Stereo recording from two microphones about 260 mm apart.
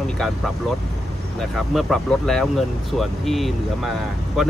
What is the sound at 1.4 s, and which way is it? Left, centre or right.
Speech, centre.